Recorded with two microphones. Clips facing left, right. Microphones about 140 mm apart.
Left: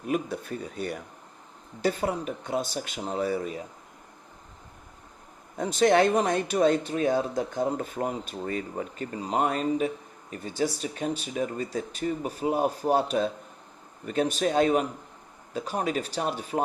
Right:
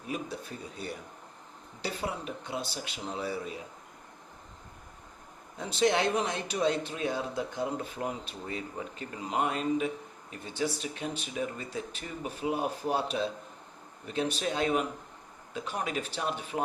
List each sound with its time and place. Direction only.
0.1 s a sound: 55° left (ahead or behind)
1.8 s speech: 45° left (ahead or behind)
5.5 s speech: 45° left (ahead or behind)